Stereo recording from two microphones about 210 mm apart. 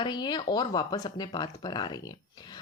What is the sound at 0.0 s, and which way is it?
Speech, 20° left (ahead or behind).